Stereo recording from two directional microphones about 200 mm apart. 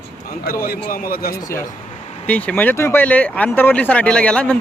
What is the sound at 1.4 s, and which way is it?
Speech, 15° left (ahead or behind).